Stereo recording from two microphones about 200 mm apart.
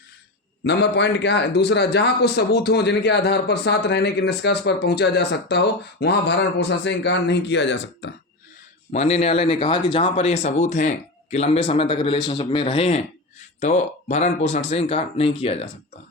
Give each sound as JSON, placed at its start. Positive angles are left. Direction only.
{"t": 0.6, "sound": "a man's voice", "side_deg": 60}
{"t": 8.9, "sound": "speech", "side_deg": 30}